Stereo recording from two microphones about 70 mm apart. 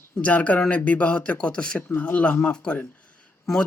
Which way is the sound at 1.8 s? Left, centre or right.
Left.